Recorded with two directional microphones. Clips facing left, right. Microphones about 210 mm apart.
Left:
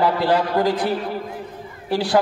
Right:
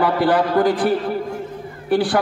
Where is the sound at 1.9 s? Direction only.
55° right (ahead or behind).